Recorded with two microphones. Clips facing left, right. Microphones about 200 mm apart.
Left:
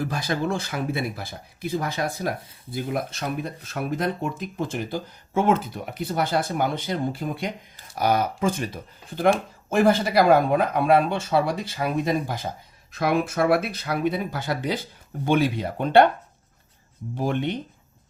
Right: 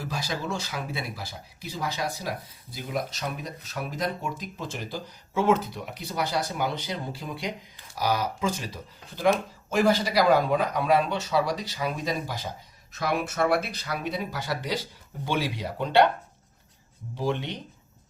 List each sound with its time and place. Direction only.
0.0 s speech: 55° left (ahead or behind)
17.2 s speech: 55° left (ahead or behind)